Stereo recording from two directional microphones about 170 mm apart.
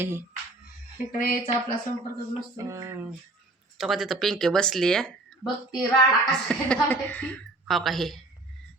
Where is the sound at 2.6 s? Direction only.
20° right (ahead or behind).